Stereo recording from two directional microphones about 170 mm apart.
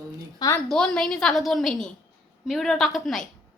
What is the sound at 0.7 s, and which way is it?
A woman's voice, 5° left (ahead or behind).